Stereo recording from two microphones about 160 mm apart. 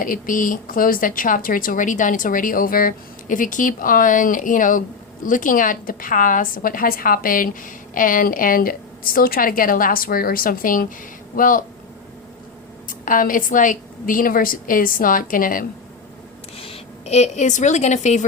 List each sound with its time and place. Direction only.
0.0 s a woman's voice: 60° left (ahead or behind)
12.9 s a woman's voice: 60° left (ahead or behind)
16.6 s a woman's voice: 35° left (ahead or behind)